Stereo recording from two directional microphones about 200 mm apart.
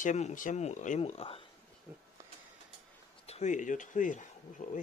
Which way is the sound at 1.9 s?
5° right (ahead or behind).